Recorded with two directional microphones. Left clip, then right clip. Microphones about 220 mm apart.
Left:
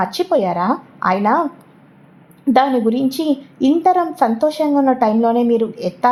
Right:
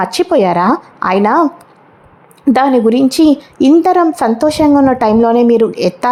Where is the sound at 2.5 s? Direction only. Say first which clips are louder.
Right 4 dB; 30° right (ahead or behind).